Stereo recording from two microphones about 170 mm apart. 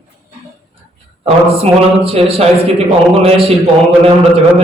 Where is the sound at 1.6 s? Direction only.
35° right (ahead or behind).